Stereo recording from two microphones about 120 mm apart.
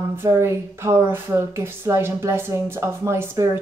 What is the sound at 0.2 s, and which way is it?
Speech, 20° right (ahead or behind).